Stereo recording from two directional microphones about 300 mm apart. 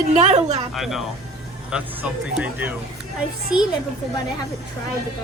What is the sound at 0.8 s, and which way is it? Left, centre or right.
Speech, centre.